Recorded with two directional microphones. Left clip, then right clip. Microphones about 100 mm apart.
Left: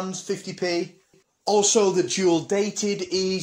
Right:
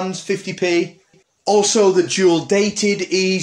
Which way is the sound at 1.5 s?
30° left (ahead or behind).